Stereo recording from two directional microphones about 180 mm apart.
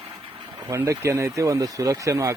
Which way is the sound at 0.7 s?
15° right (ahead or behind).